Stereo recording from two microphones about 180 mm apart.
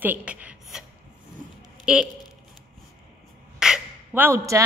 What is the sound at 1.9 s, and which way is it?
Speech, 5° right (ahead or behind).